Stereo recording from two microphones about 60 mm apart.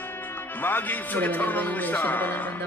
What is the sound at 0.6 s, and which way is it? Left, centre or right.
Speech, left.